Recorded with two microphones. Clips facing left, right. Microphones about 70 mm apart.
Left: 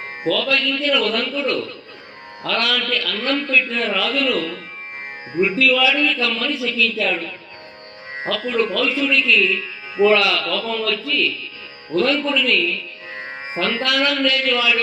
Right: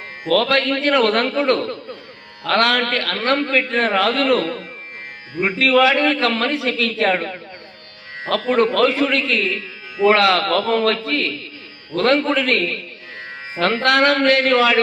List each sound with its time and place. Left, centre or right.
0.3 s a man's voice: right